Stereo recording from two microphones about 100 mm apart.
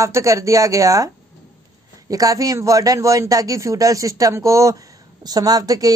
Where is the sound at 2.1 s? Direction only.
35° right (ahead or behind).